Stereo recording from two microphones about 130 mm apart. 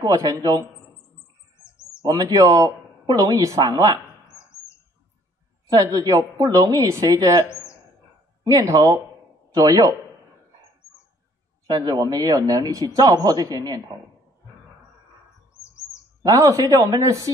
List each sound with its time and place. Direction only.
0.0 s speech: 25° right (ahead or behind)
2.0 s speech: 30° right (ahead or behind)
5.7 s speech: 25° right (ahead or behind)
8.5 s speech: 25° right (ahead or behind)
11.6 s speech: 30° right (ahead or behind)
16.2 s speech: 25° right (ahead or behind)